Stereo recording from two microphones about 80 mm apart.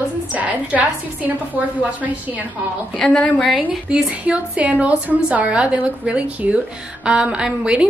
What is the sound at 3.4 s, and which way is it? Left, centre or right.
A woman's voice, centre.